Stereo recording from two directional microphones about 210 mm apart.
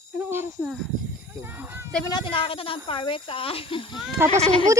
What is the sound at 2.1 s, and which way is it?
Speech, 25° left (ahead or behind).